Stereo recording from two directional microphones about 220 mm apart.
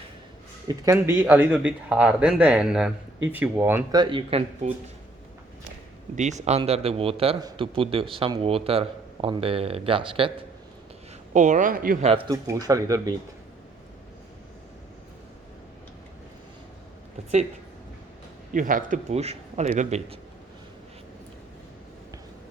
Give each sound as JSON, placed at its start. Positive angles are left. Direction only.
{"t": 0.7, "sound": "speech", "side_deg": -10}
{"t": 6.1, "sound": "a man's voice", "side_deg": -30}
{"t": 11.3, "sound": "a man's voice", "side_deg": -35}
{"t": 12.3, "sound": "speech", "side_deg": -15}
{"t": 18.5, "sound": "a man's voice", "side_deg": -35}